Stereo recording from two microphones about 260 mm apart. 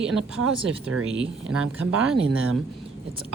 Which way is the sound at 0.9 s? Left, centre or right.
Right.